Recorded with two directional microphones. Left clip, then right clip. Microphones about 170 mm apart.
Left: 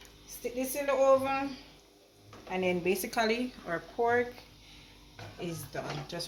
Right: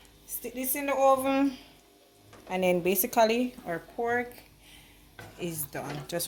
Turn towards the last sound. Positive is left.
turn(degrees=-60)  # may be behind; listen again after turning